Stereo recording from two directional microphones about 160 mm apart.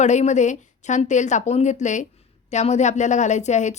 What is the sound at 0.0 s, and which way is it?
A woman's voice, 45° left (ahead or behind).